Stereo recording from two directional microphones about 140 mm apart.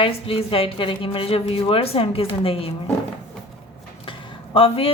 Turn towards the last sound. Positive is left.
turn(degrees=40)  # may be behind; listen again after turning